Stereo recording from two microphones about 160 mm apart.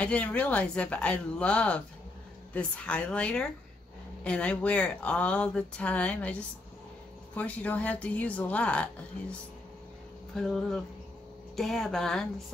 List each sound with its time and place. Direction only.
0.0 s speech: 10° left (ahead or behind)
7.3 s speech: 10° left (ahead or behind)